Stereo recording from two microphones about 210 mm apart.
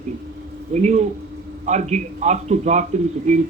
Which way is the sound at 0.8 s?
30° right (ahead or behind).